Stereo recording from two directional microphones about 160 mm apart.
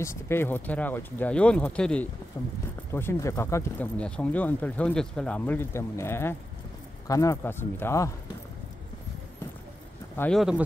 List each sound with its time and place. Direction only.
0.0 s speech: 15° left (ahead or behind)
2.3 s speech: 20° left (ahead or behind)
10.3 s speech: 5° right (ahead or behind)